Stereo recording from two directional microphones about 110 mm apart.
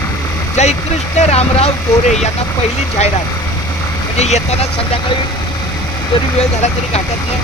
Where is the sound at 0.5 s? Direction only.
90° left.